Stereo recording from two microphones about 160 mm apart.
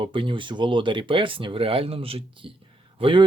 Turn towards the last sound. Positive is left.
turn(degrees=-30)  # may be behind; listen again after turning